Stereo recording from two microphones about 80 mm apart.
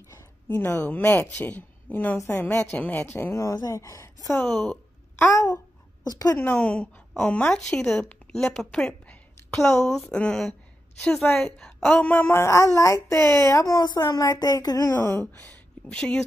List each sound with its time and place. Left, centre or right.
0.1 s a sound: left
0.7 s a woman's voice: centre
1.1 s a woman's voice: left
4.4 s a woman's voice: centre
6.0 s speech: left
6.3 s a woman's voice: left
8.3 s a sound: centre
9.6 s a woman's voice: centre
12.0 s speech: left
15.9 s a woman's voice: centre